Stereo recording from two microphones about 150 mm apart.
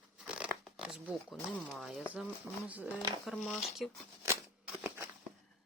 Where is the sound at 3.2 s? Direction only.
Centre (ahead or behind).